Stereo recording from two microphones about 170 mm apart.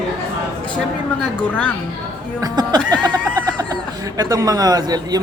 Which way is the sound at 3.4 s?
25° right (ahead or behind).